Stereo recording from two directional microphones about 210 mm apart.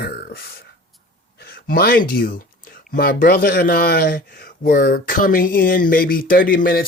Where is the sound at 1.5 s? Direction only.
45° left (ahead or behind).